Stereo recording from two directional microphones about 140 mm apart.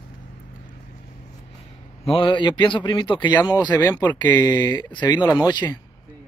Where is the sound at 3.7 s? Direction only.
15° left (ahead or behind).